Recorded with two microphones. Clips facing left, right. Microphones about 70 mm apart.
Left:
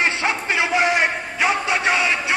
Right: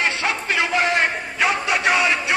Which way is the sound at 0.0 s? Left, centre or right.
Left.